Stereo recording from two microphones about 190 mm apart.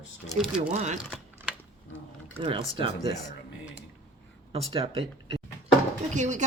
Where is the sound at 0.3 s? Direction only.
5° right (ahead or behind).